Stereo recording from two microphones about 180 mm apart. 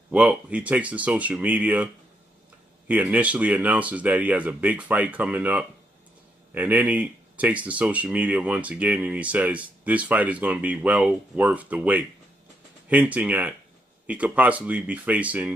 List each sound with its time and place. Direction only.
0.1 s speech: 5° right (ahead or behind)
2.9 s speech: 10° right (ahead or behind)